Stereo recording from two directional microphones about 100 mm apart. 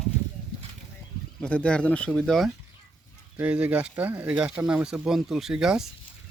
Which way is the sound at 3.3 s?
15° right (ahead or behind).